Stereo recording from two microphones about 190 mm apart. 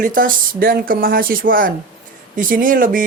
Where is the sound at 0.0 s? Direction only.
45° right (ahead or behind).